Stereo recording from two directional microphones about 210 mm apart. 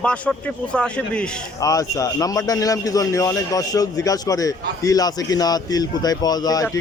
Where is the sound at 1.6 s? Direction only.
15° left (ahead or behind).